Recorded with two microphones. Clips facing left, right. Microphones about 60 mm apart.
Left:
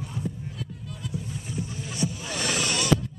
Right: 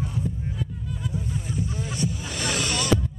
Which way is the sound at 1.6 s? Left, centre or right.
Right.